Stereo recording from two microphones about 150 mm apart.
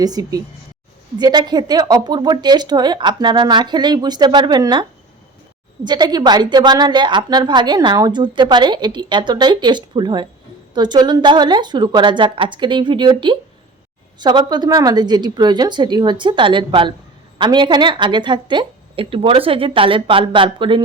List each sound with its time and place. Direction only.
0.0 s a woman's voice: 25° right (ahead or behind)